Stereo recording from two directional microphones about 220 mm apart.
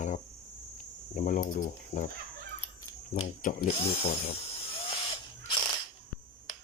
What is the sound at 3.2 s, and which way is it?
Speech, 30° left (ahead or behind).